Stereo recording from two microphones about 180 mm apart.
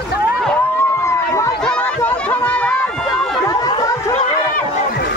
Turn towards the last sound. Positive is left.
turn(degrees=20)  # may be behind; listen again after turning